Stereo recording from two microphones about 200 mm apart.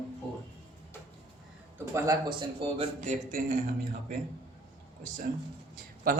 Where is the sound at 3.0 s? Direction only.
40° right (ahead or behind).